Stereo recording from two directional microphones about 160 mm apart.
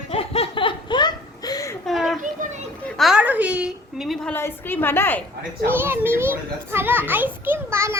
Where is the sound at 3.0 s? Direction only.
5° right (ahead or behind).